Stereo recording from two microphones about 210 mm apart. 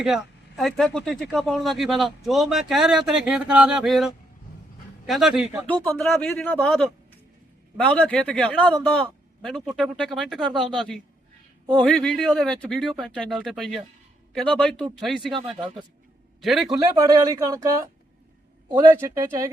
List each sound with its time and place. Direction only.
0.0 s speech: centre (ahead or behind)
5.6 s speech: 5° left (ahead or behind)
16.4 s speech: centre (ahead or behind)
16.6 s speech: 15° right (ahead or behind)
18.9 s speech: 10° right (ahead or behind)